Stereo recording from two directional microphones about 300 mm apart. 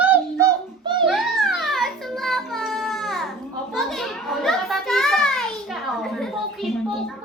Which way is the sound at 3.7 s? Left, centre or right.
Centre.